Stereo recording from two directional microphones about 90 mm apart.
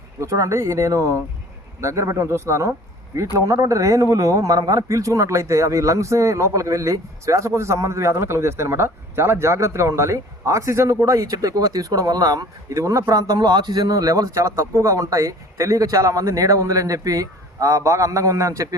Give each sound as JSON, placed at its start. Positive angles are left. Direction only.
{"t": 0.2, "sound": "a man's voice", "side_deg": -35}